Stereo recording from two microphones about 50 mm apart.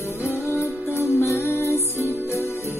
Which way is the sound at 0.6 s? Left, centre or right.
Left.